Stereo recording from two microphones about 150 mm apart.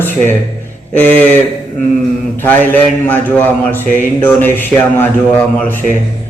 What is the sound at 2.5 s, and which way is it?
A man's voice, 10° left (ahead or behind).